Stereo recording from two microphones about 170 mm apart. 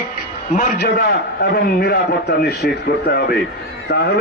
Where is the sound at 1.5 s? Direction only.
70° left (ahead or behind).